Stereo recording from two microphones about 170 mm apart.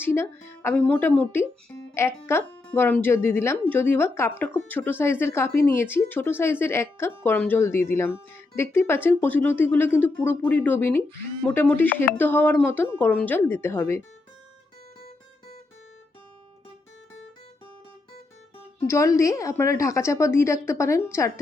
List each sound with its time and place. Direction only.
0.0 s speech: 15° left (ahead or behind)
18.9 s speech: 15° left (ahead or behind)